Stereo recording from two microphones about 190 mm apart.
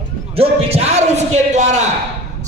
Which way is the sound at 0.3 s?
35° right (ahead or behind).